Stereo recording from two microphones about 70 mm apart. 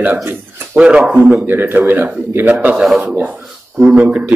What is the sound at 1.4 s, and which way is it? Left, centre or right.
Speech, right.